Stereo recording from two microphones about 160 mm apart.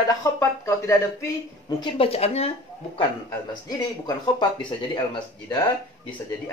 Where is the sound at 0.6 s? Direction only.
20° left (ahead or behind).